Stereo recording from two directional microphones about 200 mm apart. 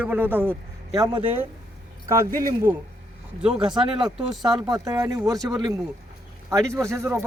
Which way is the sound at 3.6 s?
25° right (ahead or behind).